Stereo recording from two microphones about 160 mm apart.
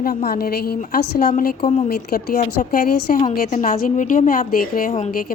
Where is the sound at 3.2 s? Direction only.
60° left (ahead or behind); by 5.1 s 45° left (ahead or behind).